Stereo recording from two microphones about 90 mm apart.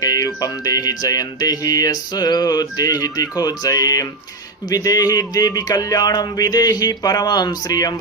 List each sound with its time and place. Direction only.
0.0 s music: 40° left (ahead or behind)